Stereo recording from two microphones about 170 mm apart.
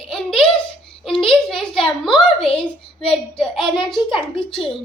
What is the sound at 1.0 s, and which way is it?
A child's voice, 5° left (ahead or behind).